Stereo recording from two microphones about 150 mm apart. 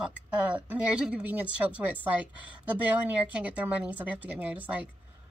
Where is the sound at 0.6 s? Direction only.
10° right (ahead or behind).